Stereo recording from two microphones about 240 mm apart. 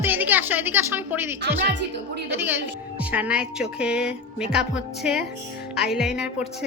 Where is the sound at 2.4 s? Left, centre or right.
Centre.